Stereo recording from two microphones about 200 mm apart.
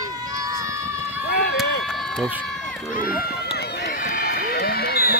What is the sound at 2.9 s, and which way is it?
Run, 45° left (ahead or behind).